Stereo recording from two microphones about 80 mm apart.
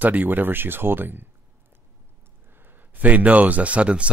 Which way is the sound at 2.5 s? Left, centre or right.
Right.